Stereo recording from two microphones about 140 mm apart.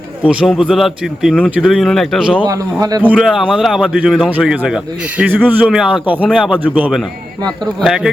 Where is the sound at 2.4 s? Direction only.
25° right (ahead or behind).